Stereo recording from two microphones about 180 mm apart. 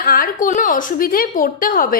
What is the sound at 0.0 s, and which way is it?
A woman's voice, 55° left (ahead or behind).